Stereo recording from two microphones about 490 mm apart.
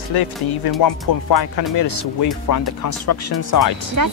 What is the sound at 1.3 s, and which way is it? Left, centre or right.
Speech, left.